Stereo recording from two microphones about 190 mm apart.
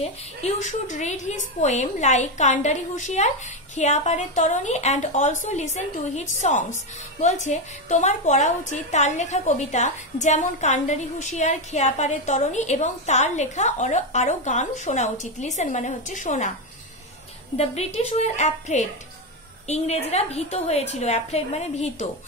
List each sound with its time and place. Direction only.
0.0 s a woman's voice: 35° left (ahead or behind)
17.6 s a woman's voice: 35° left (ahead or behind)